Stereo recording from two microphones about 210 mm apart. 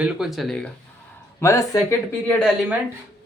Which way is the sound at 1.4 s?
15° left (ahead or behind).